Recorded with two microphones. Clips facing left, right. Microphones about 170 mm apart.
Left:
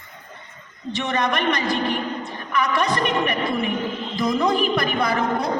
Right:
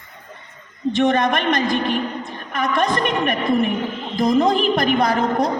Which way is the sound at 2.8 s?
50° right (ahead or behind).